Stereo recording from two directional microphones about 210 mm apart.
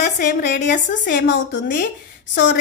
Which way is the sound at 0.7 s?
35° left (ahead or behind).